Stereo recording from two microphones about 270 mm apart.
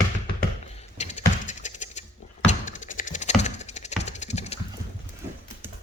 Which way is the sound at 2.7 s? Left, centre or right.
Left.